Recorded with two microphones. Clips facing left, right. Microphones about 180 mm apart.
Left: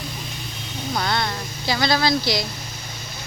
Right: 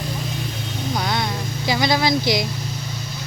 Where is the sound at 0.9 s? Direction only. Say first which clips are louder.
Even; 10° right (ahead or behind).